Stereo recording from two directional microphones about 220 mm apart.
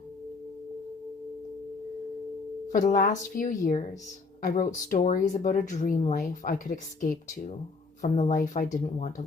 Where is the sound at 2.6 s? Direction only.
35° left (ahead or behind).